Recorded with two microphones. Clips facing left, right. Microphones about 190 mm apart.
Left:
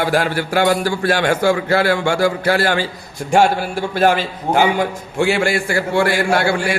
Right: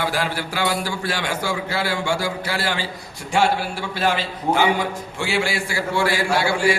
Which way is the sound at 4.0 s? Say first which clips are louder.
Left 7 dB; 50° left (ahead or behind).